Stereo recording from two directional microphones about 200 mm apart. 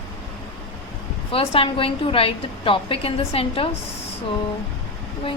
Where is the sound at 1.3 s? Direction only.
30° left (ahead or behind).